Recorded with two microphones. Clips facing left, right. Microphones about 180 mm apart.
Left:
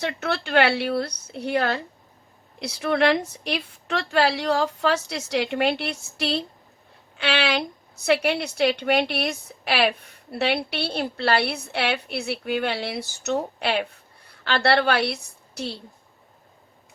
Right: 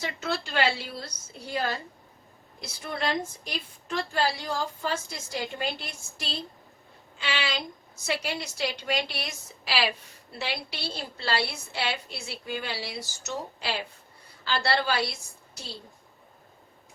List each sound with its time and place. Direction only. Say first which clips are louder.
0.0 s a woman's voice: left 5 dB; 65° left (ahead or behind)